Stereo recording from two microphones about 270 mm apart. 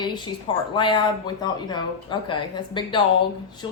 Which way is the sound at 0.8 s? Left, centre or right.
Centre.